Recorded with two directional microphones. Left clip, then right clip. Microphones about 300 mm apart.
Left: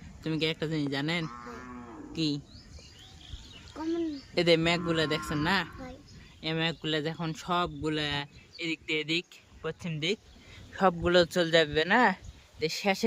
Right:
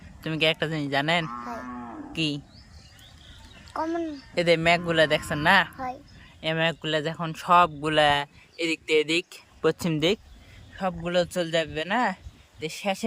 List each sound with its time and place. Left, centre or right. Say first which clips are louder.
0.2 s speech: right 7 dB; centre
1.3 s moo: right 8 dB; right
2.1 s speech: right 3 dB; centre
4.4 s speech: right 4 dB; centre
10.8 s speech: left 2 dB; centre